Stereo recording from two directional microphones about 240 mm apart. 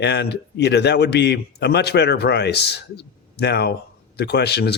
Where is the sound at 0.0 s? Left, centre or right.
Left.